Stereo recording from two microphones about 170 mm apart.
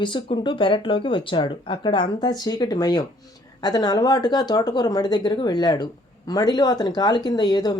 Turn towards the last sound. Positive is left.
turn(degrees=25)  # may be behind; listen again after turning